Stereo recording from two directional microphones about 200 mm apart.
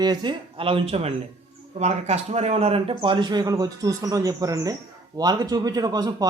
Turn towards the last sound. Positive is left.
turn(degrees=-20)  # may be behind; listen again after turning